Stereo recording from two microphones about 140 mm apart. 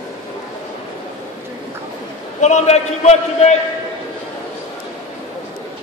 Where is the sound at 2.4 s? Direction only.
55° left (ahead or behind).